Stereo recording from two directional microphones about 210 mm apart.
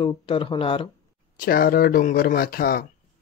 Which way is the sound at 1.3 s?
45° left (ahead or behind).